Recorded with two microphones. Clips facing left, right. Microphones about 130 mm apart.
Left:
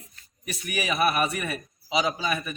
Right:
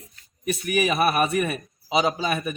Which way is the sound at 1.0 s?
35° right (ahead or behind).